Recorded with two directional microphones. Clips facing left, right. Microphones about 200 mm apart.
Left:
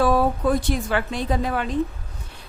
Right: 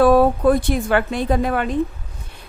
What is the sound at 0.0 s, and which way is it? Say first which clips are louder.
A woman's voice: right 6 dB; 55° right (ahead or behind).